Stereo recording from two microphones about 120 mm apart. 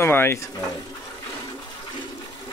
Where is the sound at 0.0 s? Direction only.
20° left (ahead or behind).